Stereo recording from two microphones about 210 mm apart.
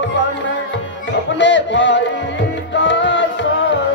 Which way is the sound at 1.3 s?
60° left (ahead or behind).